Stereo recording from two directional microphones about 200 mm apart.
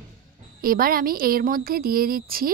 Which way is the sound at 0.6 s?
45° right (ahead or behind).